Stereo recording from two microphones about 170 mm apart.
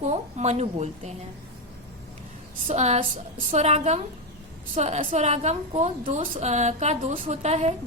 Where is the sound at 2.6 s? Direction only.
40° right (ahead or behind).